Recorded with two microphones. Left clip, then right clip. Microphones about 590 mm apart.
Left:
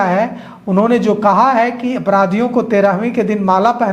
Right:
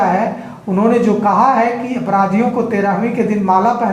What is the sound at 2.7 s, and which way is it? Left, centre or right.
A woman's voice, left.